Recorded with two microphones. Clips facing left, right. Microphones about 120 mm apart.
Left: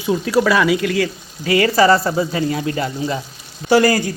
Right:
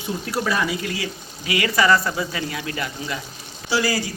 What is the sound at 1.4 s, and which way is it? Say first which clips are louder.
Speech: left 6 dB; 35° left (ahead or behind).